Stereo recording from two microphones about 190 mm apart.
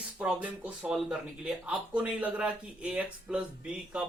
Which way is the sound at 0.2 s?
5° right (ahead or behind).